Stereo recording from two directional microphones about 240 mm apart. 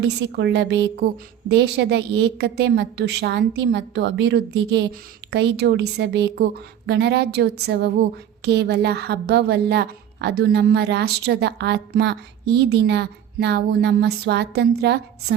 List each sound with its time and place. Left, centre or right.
0.0 s a woman's voice: right